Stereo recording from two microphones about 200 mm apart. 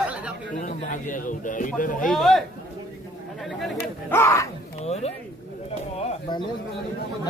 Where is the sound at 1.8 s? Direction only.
40° left (ahead or behind).